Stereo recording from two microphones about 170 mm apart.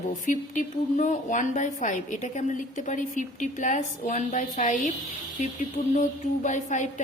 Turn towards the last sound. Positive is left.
turn(degrees=45)  # may be behind; listen again after turning